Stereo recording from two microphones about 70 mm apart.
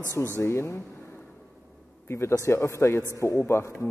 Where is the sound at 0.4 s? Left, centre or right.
Left.